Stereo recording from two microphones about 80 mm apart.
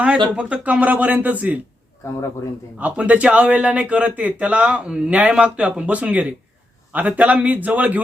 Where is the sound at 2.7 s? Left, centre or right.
Centre.